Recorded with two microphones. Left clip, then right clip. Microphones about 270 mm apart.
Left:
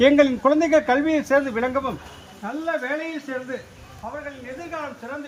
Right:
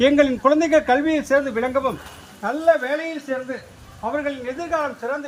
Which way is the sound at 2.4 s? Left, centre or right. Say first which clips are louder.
Right 8 dB; right.